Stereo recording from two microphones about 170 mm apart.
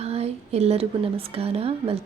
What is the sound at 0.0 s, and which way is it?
A woman's voice, 40° right (ahead or behind).